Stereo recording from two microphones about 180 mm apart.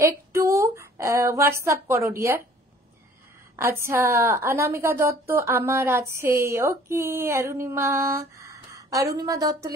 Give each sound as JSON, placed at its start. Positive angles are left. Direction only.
{"t": 0.0, "sound": "a sound", "side_deg": -15}
{"t": 1.6, "sound": "a woman's voice", "side_deg": -15}
{"t": 3.5, "sound": "a woman's voice", "side_deg": -15}